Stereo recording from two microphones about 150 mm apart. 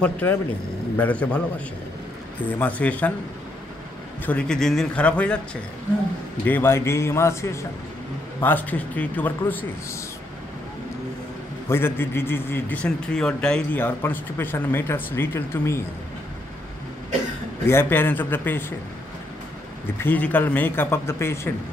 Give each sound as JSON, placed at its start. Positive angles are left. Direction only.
{"t": 0.0, "sound": "a man's voice", "side_deg": 10}
{"t": 2.6, "sound": "a man's voice", "side_deg": 10}
{"t": 4.3, "sound": "a man's voice", "side_deg": 5}
{"t": 6.4, "sound": "a man's voice", "side_deg": 15}
{"t": 11.7, "sound": "a man's voice", "side_deg": 15}
{"t": 17.6, "sound": "a man's voice", "side_deg": 15}
{"t": 20.0, "sound": "a man's voice", "side_deg": 10}